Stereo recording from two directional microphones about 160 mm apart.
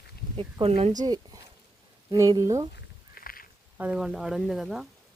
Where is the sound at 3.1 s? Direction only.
65° left (ahead or behind).